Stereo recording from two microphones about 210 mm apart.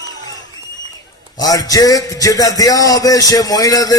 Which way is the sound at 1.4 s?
15° left (ahead or behind).